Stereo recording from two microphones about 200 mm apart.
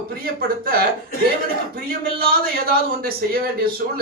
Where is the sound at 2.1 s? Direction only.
50° right (ahead or behind).